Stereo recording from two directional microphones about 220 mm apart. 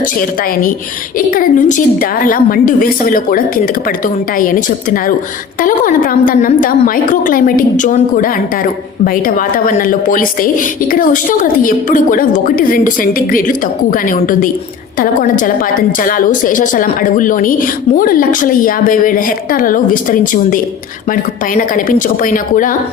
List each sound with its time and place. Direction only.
1.3 s a woman's voice: 40° left (ahead or behind)
5.6 s a woman's voice: 40° left (ahead or behind)